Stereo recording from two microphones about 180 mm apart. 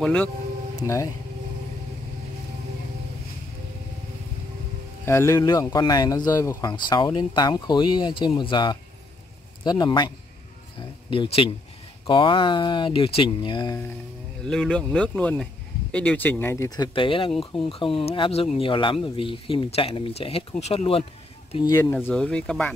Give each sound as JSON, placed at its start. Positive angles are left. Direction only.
{"t": 0.0, "sound": "speech", "side_deg": 5}
{"t": 0.7, "sound": "speech", "side_deg": 20}
{"t": 5.0, "sound": "speech", "side_deg": 15}
{"t": 10.8, "sound": "a sound", "side_deg": 30}
{"t": 12.1, "sound": "speech", "side_deg": 30}
{"t": 14.4, "sound": "speech", "side_deg": 5}
{"t": 21.9, "sound": "speech", "side_deg": 5}